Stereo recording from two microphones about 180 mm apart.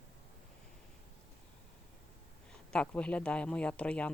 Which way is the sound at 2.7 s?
5° left (ahead or behind).